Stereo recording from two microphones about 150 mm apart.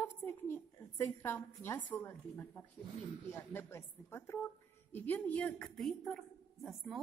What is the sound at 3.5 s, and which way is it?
A woman's voice, 15° left (ahead or behind).